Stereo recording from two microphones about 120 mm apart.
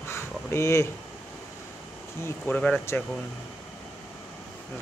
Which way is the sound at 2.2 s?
15° left (ahead or behind).